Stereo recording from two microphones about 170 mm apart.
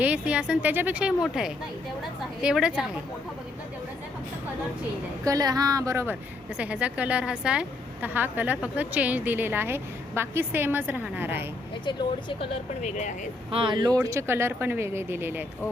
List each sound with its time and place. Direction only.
0.0 s a woman's voice: 5° right (ahead or behind)
5.2 s a woman's voice: 20° right (ahead or behind)
11.9 s speech: 25° left (ahead or behind)
12.8 s speech: 45° left (ahead or behind)
13.5 s a woman's voice: 30° right (ahead or behind); by 15.4 s 10° right (ahead or behind)